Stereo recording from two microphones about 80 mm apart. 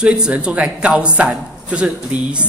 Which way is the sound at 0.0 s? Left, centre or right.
Centre.